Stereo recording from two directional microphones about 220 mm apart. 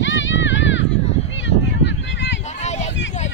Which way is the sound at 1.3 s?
55° left (ahead or behind).